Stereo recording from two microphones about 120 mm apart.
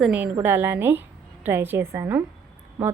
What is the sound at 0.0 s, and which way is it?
A woman's voice, 10° right (ahead or behind).